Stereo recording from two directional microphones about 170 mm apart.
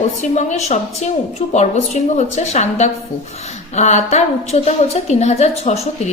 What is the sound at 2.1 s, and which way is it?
A woman's voice, 40° left (ahead or behind).